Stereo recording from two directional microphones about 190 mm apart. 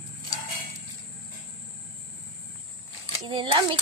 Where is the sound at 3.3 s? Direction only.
25° right (ahead or behind).